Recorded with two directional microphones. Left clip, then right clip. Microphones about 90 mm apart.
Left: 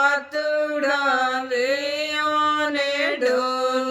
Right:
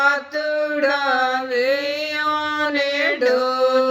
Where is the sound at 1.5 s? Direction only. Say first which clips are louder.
Right 3 dB; 20° right (ahead or behind).